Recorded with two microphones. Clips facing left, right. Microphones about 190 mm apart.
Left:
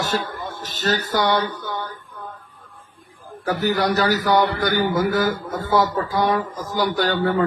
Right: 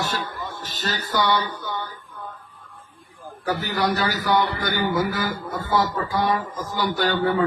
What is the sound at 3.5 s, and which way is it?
A man's voice, 40° left (ahead or behind).